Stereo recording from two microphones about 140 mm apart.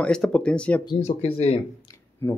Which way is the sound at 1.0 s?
50° left (ahead or behind).